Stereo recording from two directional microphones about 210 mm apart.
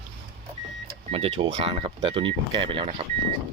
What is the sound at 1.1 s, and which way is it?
Speech, 30° right (ahead or behind).